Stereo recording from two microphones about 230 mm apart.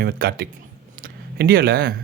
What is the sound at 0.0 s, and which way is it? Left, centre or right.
Speech, right.